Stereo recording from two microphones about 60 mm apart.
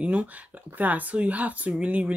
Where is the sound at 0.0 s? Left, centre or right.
Right.